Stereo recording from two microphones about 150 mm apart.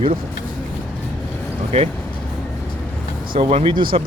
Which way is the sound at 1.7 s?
45° right (ahead or behind).